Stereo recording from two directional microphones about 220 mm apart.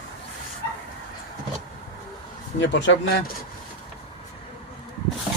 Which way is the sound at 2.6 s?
55° left (ahead or behind).